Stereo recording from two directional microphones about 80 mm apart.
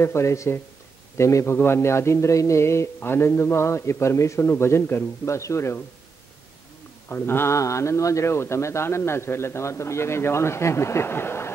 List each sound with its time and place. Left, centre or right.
0.0 s a man's voice: left
7.1 s a man's voice: left